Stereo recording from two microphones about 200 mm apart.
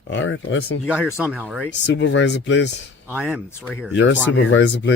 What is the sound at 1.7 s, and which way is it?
Speech, 60° left (ahead or behind).